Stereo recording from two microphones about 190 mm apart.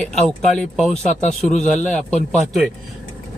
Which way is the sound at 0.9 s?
40° left (ahead or behind).